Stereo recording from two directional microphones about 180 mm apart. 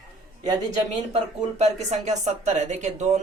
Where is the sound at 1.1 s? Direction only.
40° right (ahead or behind).